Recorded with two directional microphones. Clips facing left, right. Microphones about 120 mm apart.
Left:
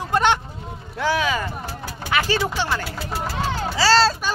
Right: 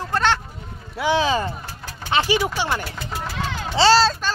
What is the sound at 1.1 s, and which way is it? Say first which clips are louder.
Speech: right 5 dB; 30° right (ahead or behind).